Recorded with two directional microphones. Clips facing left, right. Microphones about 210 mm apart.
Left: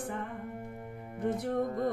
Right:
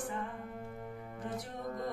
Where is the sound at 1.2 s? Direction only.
60° left (ahead or behind).